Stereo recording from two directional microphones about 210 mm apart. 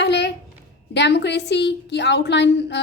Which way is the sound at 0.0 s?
55° left (ahead or behind).